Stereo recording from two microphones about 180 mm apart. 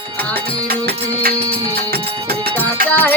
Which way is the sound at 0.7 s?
55° right (ahead or behind).